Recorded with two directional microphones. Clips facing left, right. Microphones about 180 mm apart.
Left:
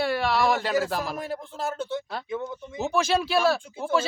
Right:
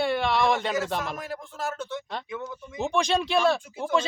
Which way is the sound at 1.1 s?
30° left (ahead or behind).